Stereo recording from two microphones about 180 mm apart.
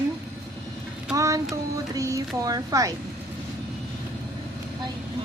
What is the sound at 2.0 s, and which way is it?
Speech, 20° right (ahead or behind).